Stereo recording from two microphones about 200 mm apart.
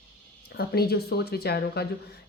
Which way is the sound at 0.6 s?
50° left (ahead or behind).